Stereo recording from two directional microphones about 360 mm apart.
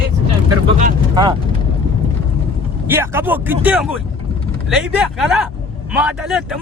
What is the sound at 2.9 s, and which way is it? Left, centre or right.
Speech, centre.